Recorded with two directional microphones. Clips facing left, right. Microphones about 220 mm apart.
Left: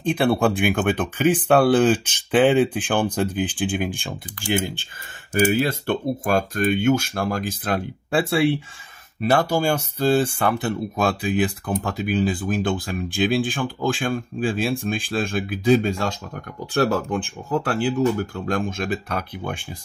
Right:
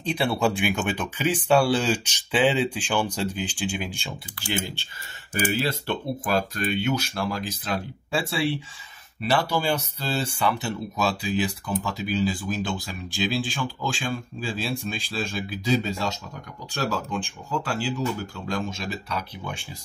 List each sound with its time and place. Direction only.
0.0 s speech: 55° left (ahead or behind)
5.5 s speech: 50° left (ahead or behind)